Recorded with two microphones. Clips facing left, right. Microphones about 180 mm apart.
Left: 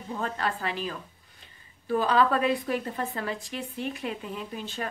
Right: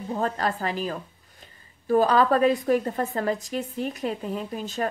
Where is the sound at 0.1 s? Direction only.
40° right (ahead or behind).